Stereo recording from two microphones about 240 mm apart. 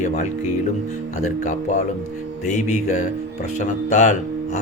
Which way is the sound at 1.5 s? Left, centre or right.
Left.